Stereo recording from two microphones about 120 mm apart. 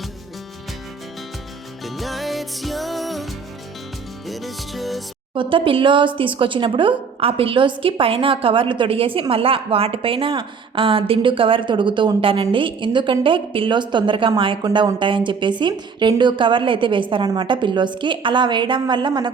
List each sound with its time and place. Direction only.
1.8 s music: centre (ahead or behind)
4.3 s music: centre (ahead or behind)
5.3 s a woman's voice: 45° right (ahead or behind)